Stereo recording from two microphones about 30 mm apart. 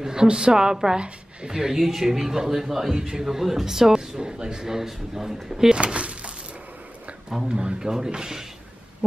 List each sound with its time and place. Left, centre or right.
0.0 s speech: right
0.9 s speech: right
1.5 s speech: right
4.6 s speech: centre
5.8 s a sound: right
7.4 s speech: right
7.8 s speech: right